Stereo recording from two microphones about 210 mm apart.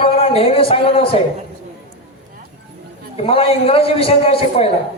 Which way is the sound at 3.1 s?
30° left (ahead or behind).